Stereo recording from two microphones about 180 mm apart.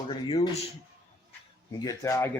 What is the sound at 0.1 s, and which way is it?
Speech, 30° left (ahead or behind).